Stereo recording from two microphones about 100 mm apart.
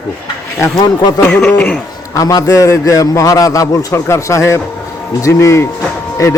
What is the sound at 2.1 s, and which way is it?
Speech, 35° left (ahead or behind).